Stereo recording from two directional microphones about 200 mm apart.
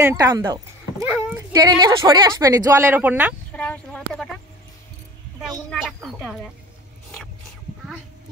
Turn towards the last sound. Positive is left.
turn(degrees=0)  # may be behind; listen again after turning